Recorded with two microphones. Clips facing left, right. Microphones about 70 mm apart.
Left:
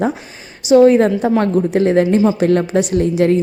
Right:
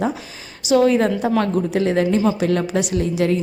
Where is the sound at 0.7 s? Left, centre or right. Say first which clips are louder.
Left 6 dB; left.